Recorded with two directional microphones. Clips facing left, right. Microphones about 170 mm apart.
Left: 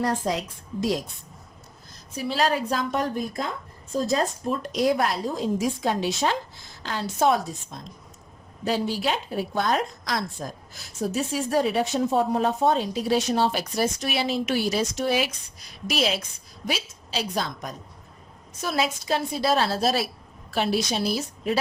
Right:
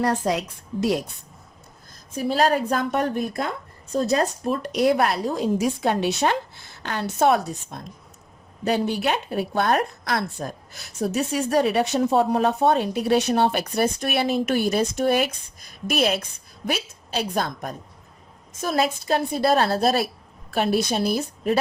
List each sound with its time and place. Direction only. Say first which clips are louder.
0.0 s speech: right 3 dB; 65° right (ahead or behind)
2.1 s a woman's voice: right 4 dB; 45° right (ahead or behind)